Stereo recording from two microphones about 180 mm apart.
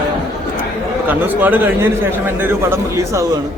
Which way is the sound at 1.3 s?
10° right (ahead or behind).